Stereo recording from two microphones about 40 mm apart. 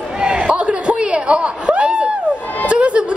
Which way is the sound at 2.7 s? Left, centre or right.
Right.